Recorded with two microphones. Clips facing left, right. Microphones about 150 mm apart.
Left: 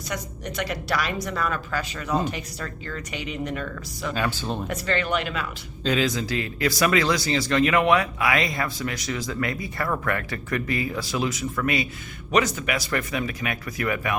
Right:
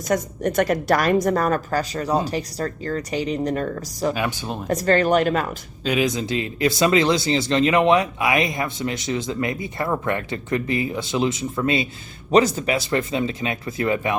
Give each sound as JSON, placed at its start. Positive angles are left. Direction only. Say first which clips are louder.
{"t": 0.1, "sound": "a woman's voice", "louder": "right 11 dB", "side_deg": -50}
{"t": 4.1, "sound": "speech", "louder": "right 1 dB", "side_deg": -15}
{"t": 4.7, "sound": "speech", "louder": "right 10 dB", "side_deg": -40}
{"t": 5.8, "sound": "speech", "louder": "right 2 dB", "side_deg": -15}